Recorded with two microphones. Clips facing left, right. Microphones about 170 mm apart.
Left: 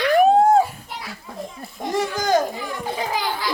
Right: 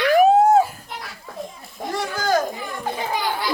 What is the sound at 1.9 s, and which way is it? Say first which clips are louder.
Speech: left 2 dB; 15° left (ahead or behind).